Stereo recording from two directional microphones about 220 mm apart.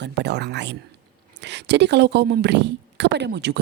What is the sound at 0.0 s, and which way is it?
A woman's voice, 50° right (ahead or behind).